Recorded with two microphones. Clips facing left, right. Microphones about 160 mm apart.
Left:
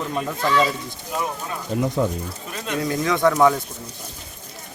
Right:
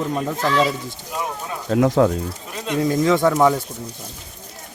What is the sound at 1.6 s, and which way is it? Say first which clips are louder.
Speech: right 6 dB; 90° right.